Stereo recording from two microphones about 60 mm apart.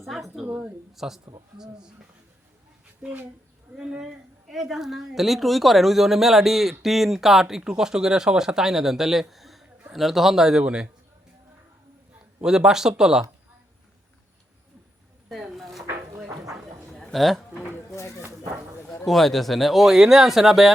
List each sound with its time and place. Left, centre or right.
0.0 s a sound: centre
0.4 s speech: right
0.9 s speech: centre
3.8 s speech: right
4.0 s a woman's voice: centre
9.3 s a sound: centre
9.9 s a woman's voice: centre
12.4 s speech: centre
15.5 s dishes: centre
16.9 s a sound: centre
19.0 s a woman's voice: centre